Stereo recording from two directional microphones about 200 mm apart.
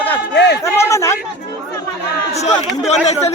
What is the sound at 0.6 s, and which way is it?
Speech, 15° left (ahead or behind).